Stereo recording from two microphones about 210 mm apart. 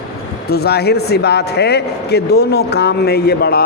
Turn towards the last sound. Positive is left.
turn(degrees=50)  # may be behind; listen again after turning